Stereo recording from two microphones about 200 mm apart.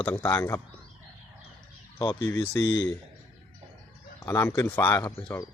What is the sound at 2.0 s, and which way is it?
Speech, 20° left (ahead or behind).